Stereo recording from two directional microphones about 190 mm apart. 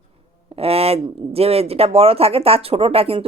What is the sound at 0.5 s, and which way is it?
Speech, 30° right (ahead or behind).